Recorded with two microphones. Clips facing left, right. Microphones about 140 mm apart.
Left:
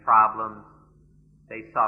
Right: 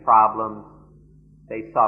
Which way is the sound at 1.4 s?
35° right (ahead or behind).